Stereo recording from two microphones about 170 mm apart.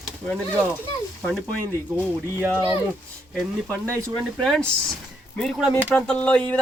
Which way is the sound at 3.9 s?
20° right (ahead or behind).